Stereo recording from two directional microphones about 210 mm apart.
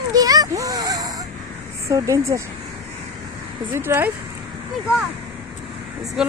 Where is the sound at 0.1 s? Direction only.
15° right (ahead or behind).